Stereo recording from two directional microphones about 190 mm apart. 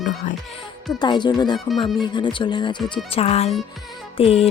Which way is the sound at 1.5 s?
Centre (ahead or behind).